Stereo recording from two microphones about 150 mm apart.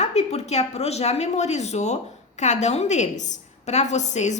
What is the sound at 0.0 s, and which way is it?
A woman's voice, 45° left (ahead or behind).